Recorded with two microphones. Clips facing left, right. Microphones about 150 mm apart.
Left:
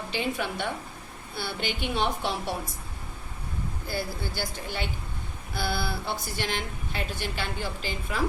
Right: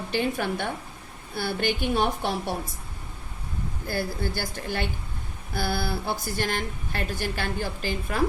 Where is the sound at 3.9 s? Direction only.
50° right (ahead or behind).